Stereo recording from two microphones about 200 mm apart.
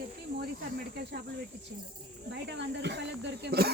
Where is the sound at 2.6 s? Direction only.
60° right (ahead or behind).